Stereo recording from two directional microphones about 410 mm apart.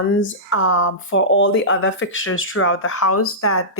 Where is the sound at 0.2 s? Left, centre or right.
Left.